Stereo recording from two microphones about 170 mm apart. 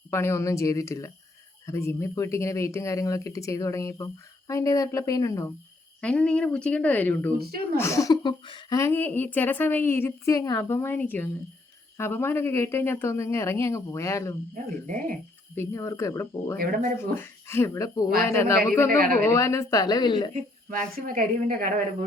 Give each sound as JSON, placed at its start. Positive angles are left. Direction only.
{"t": 0.1, "sound": "speech", "side_deg": 15}
{"t": 6.0, "sound": "speech", "side_deg": 5}
{"t": 8.8, "sound": "speech", "side_deg": 10}
{"t": 15.5, "sound": "speech", "side_deg": 15}
{"t": 16.6, "sound": "a woman's voice", "side_deg": -55}
{"t": 17.0, "sound": "speech", "side_deg": 15}
{"t": 18.9, "sound": "a woman's voice", "side_deg": -55}
{"t": 19.2, "sound": "speech", "side_deg": 15}
{"t": 20.3, "sound": "a woman's voice", "side_deg": -50}